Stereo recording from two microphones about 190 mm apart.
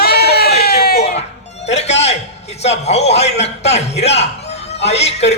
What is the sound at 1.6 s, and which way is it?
Music, 35° left (ahead or behind).